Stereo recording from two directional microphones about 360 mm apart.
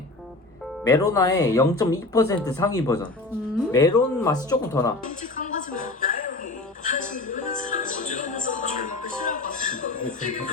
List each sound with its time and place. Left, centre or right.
0.9 s speech: centre
5.0 s music: left